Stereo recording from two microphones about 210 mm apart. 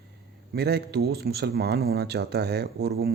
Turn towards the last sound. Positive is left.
turn(degrees=-50)  # may be behind; listen again after turning